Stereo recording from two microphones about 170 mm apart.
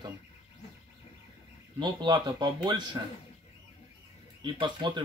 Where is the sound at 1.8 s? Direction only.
25° right (ahead or behind).